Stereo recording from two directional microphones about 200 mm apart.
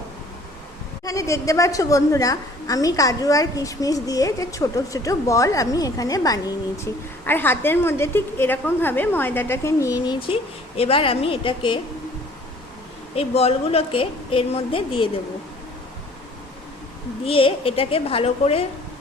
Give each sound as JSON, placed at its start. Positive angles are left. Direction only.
{"t": 1.0, "sound": "a woman's voice", "side_deg": 15}
{"t": 10.2, "sound": "a woman's voice", "side_deg": 30}
{"t": 13.1, "sound": "a woman's voice", "side_deg": 30}
{"t": 17.2, "sound": "a woman's voice", "side_deg": 25}